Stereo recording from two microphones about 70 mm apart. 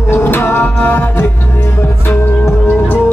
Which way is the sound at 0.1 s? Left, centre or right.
Left.